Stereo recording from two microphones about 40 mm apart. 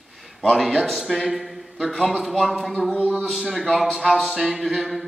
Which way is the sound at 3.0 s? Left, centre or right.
Right.